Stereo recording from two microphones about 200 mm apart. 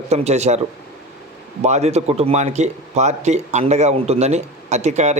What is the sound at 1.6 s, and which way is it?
Speech, 35° right (ahead or behind).